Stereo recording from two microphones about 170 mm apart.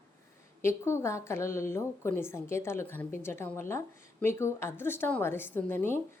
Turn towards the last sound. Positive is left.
turn(degrees=10)  # may be behind; listen again after turning